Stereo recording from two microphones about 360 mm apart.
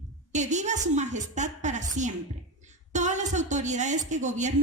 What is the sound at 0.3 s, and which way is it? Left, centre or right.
A woman's voice, centre.